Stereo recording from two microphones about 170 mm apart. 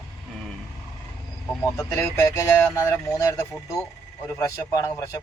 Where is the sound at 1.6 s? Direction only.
15° left (ahead or behind).